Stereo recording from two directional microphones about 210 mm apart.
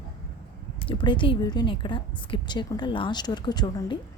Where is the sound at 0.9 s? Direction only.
25° left (ahead or behind).